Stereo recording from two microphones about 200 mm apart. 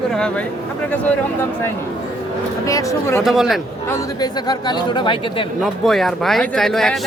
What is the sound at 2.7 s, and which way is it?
Speech, 15° left (ahead or behind).